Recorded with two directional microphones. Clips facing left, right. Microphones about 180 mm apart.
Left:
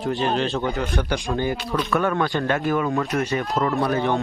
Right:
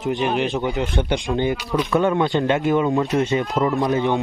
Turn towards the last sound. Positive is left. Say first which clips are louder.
# right 2 dB
turn(degrees=-20)  # may be behind; listen again after turning